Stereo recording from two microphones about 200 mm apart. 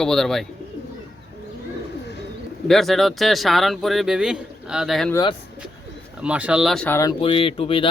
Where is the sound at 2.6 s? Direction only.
Centre (ahead or behind).